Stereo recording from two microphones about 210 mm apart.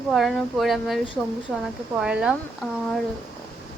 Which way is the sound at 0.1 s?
Centre (ahead or behind).